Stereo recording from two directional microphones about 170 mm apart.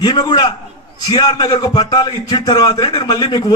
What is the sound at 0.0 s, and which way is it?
A man's voice, 25° left (ahead or behind).